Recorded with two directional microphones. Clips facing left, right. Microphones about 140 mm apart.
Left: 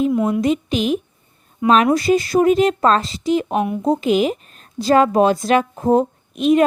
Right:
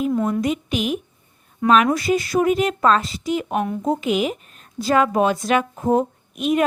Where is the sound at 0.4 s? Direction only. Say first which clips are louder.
Left 4 dB; 25° left (ahead or behind).